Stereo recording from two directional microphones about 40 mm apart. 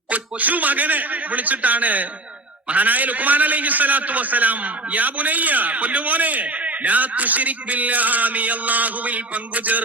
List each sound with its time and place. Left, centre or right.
0.1 s a man's voice: right